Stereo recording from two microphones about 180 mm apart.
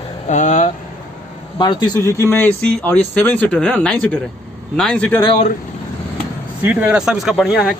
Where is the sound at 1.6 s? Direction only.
20° left (ahead or behind); by 5.2 s 5° left (ahead or behind).